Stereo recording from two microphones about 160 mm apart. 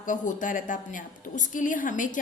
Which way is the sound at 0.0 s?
55° left (ahead or behind).